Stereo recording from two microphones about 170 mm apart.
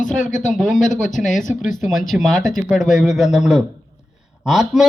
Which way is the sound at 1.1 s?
Centre (ahead or behind).